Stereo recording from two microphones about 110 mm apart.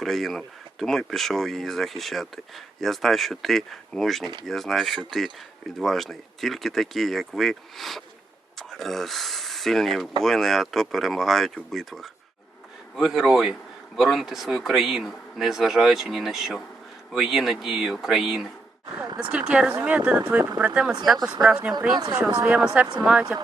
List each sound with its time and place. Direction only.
0.0 s speech: centre (ahead or behind)
19.0 s a sound: 35° right (ahead or behind)
19.3 s speech: 10° right (ahead or behind)
21.9 s speech: 45° right (ahead or behind)
22.4 s speech: 10° right (ahead or behind)